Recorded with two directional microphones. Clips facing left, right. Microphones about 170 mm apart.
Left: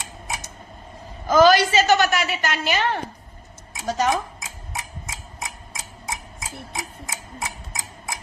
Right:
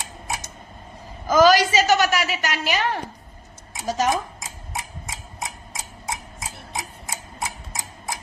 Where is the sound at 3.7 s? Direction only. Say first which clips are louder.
Even; centre (ahead or behind).